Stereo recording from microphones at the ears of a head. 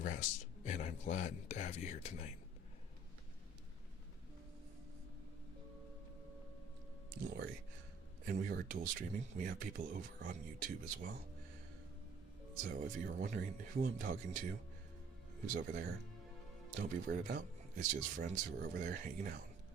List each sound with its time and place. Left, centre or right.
0.0 s speech: left
7.1 s speech: right
12.5 s speech: right